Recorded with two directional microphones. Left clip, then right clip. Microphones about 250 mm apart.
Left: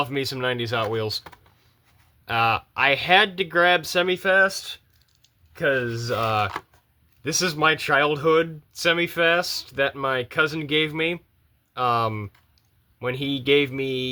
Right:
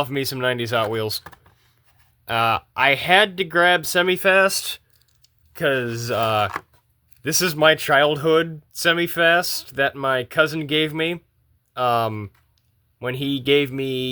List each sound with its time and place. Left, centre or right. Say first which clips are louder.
0.0 s speech: right 2 dB; right
2.2 s speech: right 1 dB; right